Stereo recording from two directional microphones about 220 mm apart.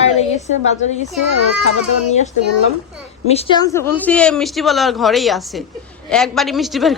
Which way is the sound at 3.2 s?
25° left (ahead or behind).